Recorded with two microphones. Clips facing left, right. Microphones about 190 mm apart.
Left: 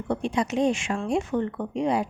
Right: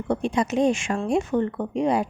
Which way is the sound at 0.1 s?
45° right (ahead or behind).